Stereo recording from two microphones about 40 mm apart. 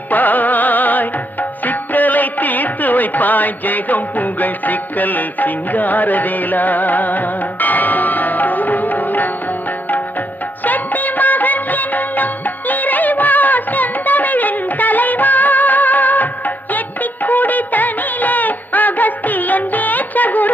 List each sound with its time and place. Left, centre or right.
0.1 s music: left
16.7 s music of bollywood: left